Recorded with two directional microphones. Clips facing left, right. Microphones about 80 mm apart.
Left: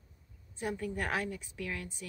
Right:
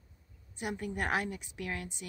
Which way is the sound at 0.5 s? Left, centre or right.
Centre.